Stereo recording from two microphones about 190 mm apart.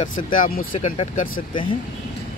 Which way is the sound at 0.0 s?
45° left (ahead or behind).